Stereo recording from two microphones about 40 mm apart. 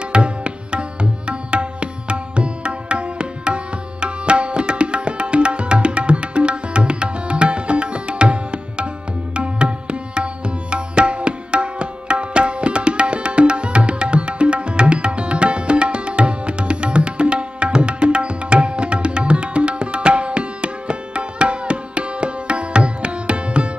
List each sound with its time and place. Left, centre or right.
0.1 s tabla: right